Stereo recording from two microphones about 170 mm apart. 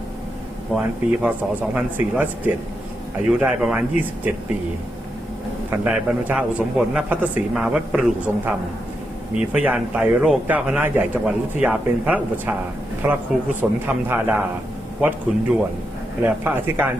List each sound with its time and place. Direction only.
0.7 s speech: 5° right (ahead or behind)
5.7 s speech: 10° right (ahead or behind)
16.2 s speech: 10° right (ahead or behind)